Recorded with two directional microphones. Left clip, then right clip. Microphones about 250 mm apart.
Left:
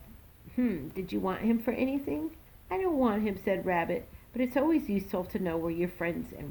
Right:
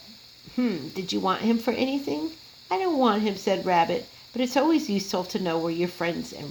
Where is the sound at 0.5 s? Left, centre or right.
Right.